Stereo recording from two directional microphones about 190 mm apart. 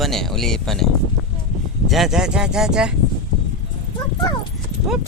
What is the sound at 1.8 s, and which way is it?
Speech, centre (ahead or behind).